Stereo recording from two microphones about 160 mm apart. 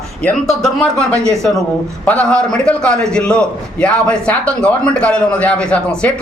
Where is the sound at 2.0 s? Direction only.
10° left (ahead or behind).